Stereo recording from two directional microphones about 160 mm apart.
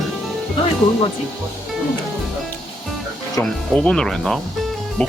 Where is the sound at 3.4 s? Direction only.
15° left (ahead or behind).